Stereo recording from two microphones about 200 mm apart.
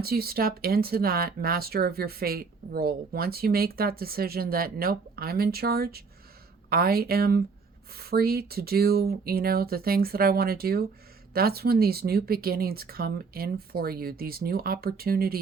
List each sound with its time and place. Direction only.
0.0 s speech: 50° right (ahead or behind)